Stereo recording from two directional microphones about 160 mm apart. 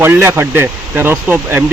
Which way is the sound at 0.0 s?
15° right (ahead or behind).